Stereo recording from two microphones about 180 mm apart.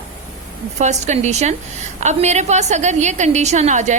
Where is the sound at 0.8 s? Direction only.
40° right (ahead or behind).